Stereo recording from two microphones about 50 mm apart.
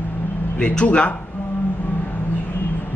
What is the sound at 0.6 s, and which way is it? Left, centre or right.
Speech, left.